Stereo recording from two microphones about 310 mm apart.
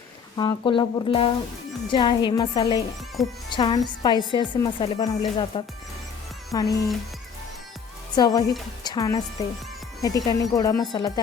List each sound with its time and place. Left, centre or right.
0.3 s a woman's voice: centre
3.2 s speech: centre
3.5 s a woman's voice: centre
8.1 s a woman's voice: centre